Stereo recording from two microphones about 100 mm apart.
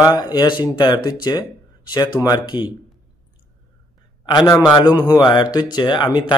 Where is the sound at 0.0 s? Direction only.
40° left (ahead or behind).